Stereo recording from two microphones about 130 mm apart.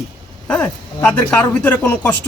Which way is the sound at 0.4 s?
5° left (ahead or behind).